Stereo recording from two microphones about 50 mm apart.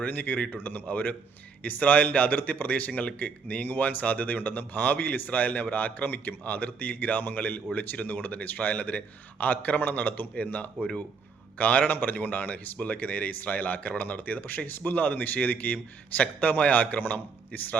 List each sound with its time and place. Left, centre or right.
0.0 s speech: left
10.3 s speech: left